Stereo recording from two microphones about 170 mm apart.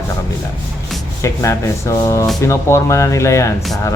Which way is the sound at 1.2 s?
20° left (ahead or behind).